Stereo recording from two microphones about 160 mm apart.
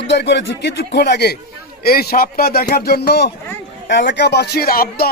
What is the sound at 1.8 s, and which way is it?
A man's voice, 75° left (ahead or behind).